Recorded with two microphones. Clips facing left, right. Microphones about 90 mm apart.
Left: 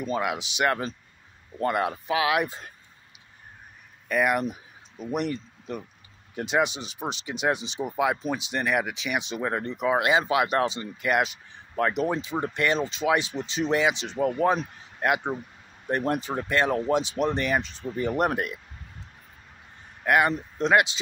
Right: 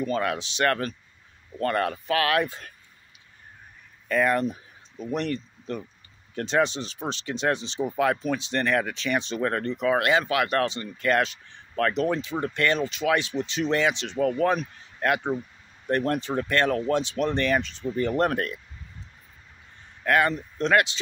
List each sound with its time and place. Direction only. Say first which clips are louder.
0.0 s speech: right 1 dB; 15° left (ahead or behind)
4.1 s speech: right 1 dB; 15° left (ahead or behind)
20.1 s speech: even; 20° left (ahead or behind)